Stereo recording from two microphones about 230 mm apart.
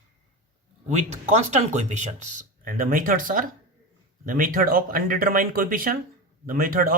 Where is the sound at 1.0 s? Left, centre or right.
Right.